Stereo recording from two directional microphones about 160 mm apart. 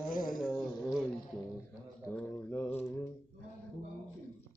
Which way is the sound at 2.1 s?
10° left (ahead or behind).